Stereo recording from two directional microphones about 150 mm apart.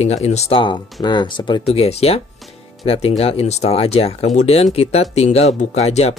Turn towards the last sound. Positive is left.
turn(degrees=45)  # may be behind; listen again after turning